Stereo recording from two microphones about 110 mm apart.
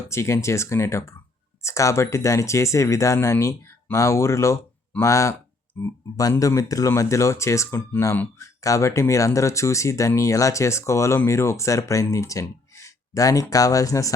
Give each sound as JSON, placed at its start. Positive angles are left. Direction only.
{"t": 0.1, "sound": "speech", "side_deg": 25}